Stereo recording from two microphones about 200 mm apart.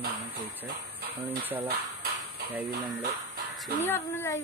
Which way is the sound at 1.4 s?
10° right (ahead or behind).